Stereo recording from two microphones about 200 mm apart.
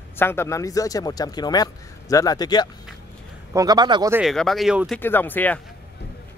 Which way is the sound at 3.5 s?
20° right (ahead or behind).